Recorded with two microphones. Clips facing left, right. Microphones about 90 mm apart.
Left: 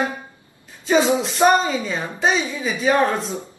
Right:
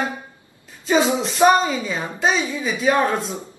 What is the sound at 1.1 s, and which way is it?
A woman's voice, centre (ahead or behind).